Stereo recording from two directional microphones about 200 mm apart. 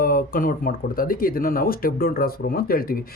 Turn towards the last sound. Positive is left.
turn(degrees=45)  # may be behind; listen again after turning